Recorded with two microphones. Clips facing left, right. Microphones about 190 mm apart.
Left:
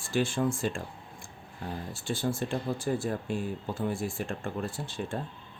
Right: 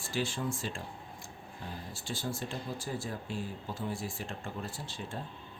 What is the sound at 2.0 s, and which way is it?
Speech, 55° left (ahead or behind).